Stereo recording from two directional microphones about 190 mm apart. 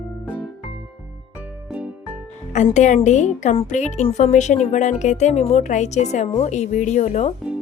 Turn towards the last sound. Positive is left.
turn(degrees=35)  # may be behind; listen again after turning